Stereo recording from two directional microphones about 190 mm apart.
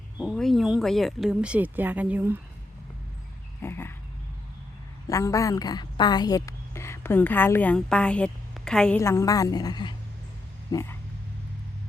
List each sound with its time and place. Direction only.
0.2 s speech: centre (ahead or behind)
3.6 s a sound: 10° left (ahead or behind)
5.0 s a woman's voice: 15° left (ahead or behind)
9.0 s a woman's voice: 15° left (ahead or behind)